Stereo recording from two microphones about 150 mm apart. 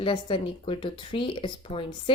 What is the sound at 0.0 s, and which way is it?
Speech, 35° left (ahead or behind).